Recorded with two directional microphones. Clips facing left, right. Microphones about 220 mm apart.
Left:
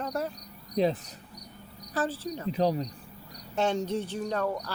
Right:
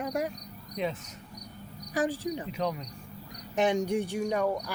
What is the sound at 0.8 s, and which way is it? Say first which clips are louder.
Speech: left 7 dB; 35° left (ahead or behind).